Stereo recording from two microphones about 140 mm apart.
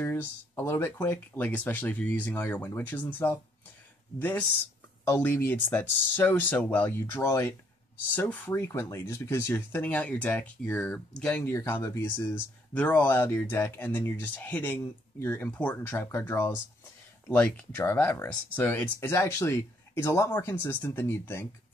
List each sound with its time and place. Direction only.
0.0 s speech: 15° left (ahead or behind)